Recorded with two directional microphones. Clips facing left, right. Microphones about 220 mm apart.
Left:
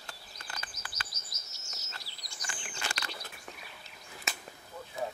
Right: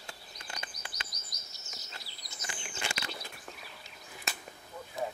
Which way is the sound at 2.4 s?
25° right (ahead or behind).